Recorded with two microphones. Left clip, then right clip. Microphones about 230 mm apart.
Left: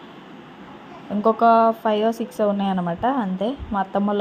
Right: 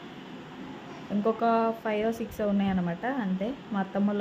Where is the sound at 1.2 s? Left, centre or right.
Centre.